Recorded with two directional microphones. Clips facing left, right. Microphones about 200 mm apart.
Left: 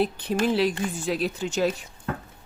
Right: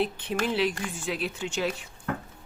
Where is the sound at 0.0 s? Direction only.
40° left (ahead or behind).